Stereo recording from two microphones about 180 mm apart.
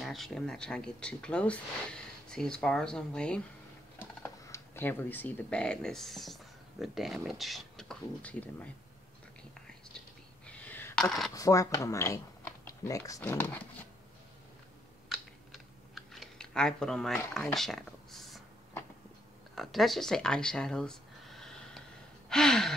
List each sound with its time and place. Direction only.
0.0 s speech: centre (ahead or behind)
9.9 s a sound: 5° left (ahead or behind)
11.3 s speech: 20° left (ahead or behind)
15.0 s typing: centre (ahead or behind)
17.3 s a sound: centre (ahead or behind)
19.5 s speech: centre (ahead or behind)